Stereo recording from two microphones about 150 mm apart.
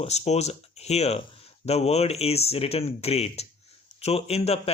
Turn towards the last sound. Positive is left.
turn(degrees=45)  # may be behind; listen again after turning